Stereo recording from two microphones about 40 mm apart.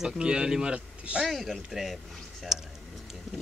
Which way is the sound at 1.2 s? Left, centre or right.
Centre.